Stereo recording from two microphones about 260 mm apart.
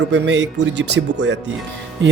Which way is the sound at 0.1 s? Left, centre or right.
Right.